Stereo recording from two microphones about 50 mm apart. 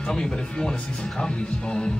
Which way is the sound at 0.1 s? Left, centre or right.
Centre.